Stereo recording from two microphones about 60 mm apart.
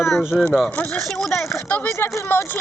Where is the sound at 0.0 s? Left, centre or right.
Centre.